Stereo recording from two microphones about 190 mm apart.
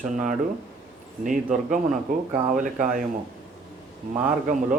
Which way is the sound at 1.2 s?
45° right (ahead or behind).